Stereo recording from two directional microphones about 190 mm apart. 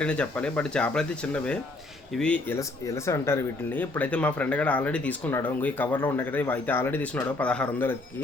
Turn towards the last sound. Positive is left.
turn(degrees=10)  # may be behind; listen again after turning